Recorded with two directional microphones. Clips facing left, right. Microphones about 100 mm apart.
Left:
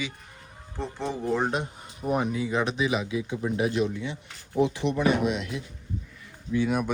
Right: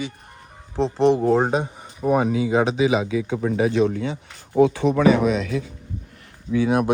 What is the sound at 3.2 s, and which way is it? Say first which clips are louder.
Speech: right 6 dB; 90° right.